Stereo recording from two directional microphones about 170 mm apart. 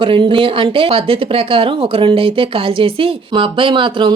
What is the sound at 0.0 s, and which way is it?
Speech, 30° right (ahead or behind).